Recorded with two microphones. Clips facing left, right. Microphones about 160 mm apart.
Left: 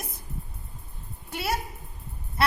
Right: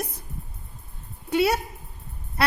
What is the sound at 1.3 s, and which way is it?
Speech, 75° right (ahead or behind).